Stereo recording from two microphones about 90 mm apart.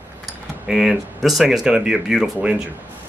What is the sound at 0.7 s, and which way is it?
Speech, 5° right (ahead or behind).